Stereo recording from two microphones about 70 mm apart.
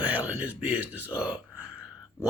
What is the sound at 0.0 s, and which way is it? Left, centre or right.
Speech, right.